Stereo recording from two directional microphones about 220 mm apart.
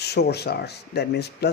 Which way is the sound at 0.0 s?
50° left (ahead or behind).